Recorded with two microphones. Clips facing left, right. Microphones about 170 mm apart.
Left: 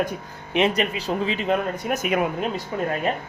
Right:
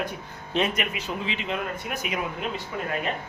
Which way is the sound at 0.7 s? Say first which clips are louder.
Left 6 dB; 35° left (ahead or behind).